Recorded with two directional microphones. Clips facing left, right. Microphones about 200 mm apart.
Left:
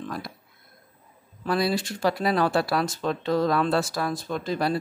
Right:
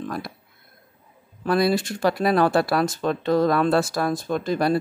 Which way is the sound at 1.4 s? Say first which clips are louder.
Right 4 dB; 50° right (ahead or behind).